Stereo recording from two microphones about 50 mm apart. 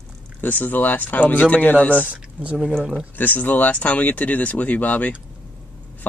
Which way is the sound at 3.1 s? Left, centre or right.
Left.